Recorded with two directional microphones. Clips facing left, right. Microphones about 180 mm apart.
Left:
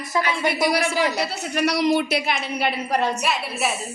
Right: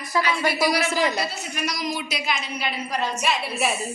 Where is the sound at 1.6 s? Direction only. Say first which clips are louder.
Left 10 dB; 70° left (ahead or behind).